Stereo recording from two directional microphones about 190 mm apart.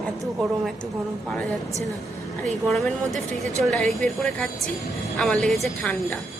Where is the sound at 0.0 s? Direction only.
Centre (ahead or behind).